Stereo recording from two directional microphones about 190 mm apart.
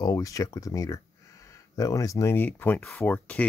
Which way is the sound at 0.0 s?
20° left (ahead or behind).